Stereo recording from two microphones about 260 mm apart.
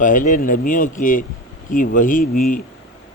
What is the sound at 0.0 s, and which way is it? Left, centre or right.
Speech, left.